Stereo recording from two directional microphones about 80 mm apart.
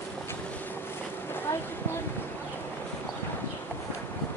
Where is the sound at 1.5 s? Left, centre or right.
Left.